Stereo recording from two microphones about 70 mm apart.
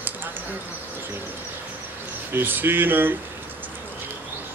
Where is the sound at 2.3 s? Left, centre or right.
Right.